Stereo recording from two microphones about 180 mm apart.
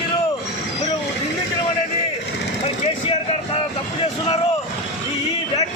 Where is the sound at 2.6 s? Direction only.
35° left (ahead or behind).